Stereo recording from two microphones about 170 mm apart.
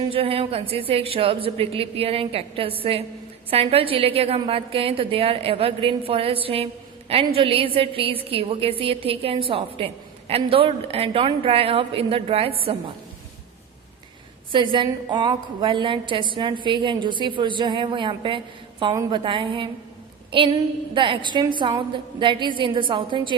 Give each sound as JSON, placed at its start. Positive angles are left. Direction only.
{"t": 0.1, "sound": "a woman's voice", "side_deg": -35}
{"t": 14.5, "sound": "a woman's voice", "side_deg": -30}